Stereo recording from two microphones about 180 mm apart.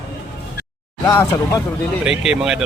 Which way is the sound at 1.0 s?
20° left (ahead or behind).